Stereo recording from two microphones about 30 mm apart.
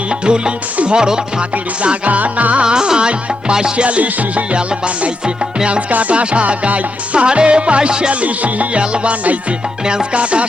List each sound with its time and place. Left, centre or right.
0.1 s music: right
1.4 s music: right
2.0 s music: right
2.6 s music: right
3.8 s music: right
5.9 s music: right
7.3 s music: right
8.1 s music: right
8.8 s music: right